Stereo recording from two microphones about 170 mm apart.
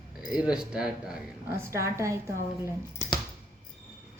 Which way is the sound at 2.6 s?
20° left (ahead or behind).